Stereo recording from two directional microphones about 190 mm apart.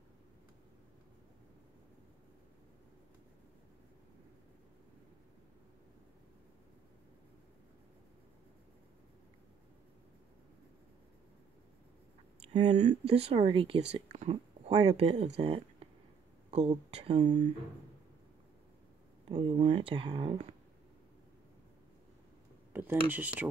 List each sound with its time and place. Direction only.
12.5 s speech: 35° right (ahead or behind)
19.2 s speech: 35° right (ahead or behind)
22.7 s speech: 10° right (ahead or behind)